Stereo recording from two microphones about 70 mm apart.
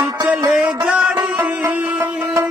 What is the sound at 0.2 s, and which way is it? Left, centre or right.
Music, centre.